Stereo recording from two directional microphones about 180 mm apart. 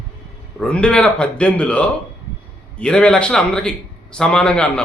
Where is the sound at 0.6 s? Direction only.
5° left (ahead or behind).